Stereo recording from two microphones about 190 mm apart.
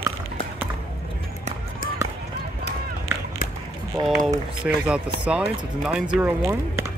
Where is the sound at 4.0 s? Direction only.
25° right (ahead or behind).